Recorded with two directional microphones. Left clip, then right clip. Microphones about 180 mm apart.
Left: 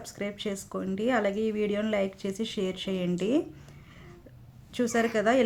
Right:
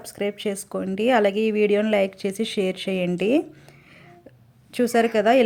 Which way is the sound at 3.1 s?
30° right (ahead or behind).